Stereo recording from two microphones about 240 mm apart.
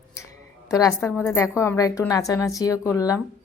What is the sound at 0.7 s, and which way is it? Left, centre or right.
A woman's voice, centre.